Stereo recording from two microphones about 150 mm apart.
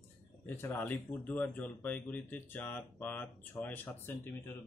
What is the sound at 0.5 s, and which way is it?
Speech, 15° left (ahead or behind).